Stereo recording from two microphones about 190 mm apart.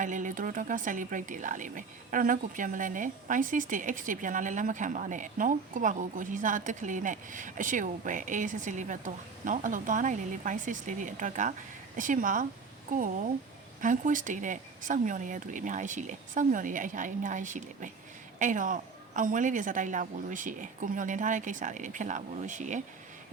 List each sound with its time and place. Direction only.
0.0 s speech: 45° right (ahead or behind)